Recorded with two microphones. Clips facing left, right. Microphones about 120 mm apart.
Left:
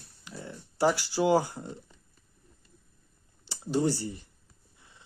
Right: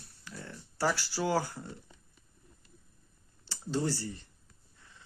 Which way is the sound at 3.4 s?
15° left (ahead or behind).